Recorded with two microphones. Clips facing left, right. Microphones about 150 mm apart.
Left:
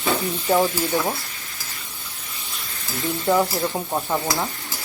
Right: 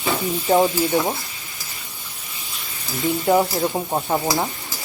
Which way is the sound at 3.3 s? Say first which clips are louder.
Right 1 dB; 15° right (ahead or behind).